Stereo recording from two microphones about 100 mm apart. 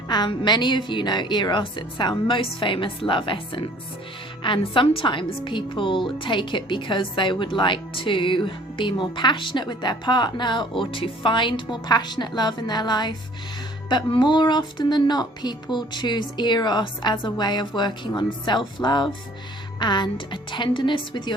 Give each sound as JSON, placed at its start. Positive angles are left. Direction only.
{"t": 0.1, "sound": "a woman's voice", "side_deg": 45}